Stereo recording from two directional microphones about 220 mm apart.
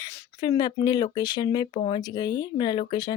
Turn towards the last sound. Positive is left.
turn(degrees=20)  # may be behind; listen again after turning